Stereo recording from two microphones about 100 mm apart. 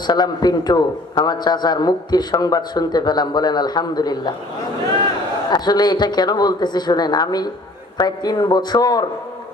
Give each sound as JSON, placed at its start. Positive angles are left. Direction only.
{"t": 0.1, "sound": "a man's voice", "side_deg": 45}
{"t": 5.5, "sound": "a man's voice", "side_deg": 45}